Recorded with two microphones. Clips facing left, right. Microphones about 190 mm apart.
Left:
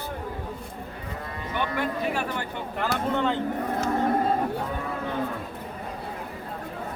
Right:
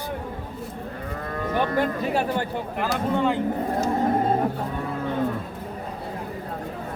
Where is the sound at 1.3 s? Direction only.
45° right (ahead or behind).